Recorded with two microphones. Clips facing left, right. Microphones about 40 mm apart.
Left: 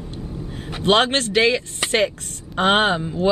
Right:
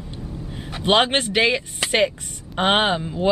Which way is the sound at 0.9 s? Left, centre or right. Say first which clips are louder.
Left 1 dB; centre.